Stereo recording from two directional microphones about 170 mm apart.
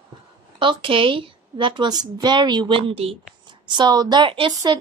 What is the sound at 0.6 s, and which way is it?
A woman's voice, 30° right (ahead or behind).